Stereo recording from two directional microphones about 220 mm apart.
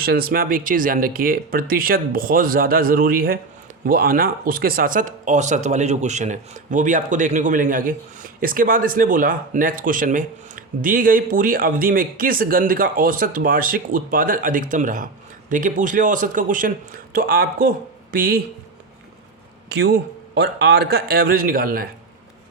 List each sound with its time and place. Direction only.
0.0 s speech: 45° right (ahead or behind)
19.6 s a man's voice: 45° right (ahead or behind)